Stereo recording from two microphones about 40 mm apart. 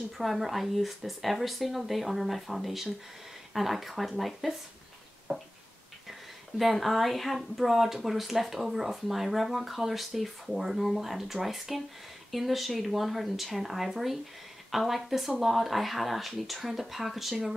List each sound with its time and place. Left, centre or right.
0.2 s speech: centre
5.3 s a sound: right
6.6 s speech: centre